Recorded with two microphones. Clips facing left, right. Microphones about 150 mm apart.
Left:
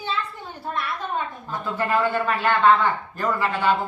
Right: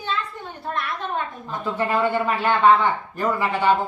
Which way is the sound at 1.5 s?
15° right (ahead or behind).